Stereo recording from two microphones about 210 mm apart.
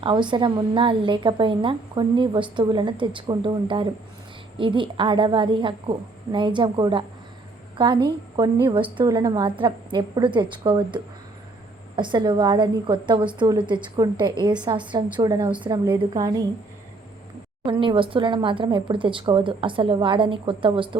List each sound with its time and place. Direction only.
0.0 s a woman's voice: 20° right (ahead or behind)
17.7 s a woman's voice: 25° right (ahead or behind)